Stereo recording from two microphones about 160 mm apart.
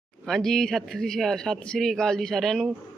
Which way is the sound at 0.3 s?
Centre (ahead or behind).